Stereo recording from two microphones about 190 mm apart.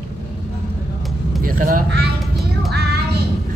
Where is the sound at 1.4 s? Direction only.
45° right (ahead or behind).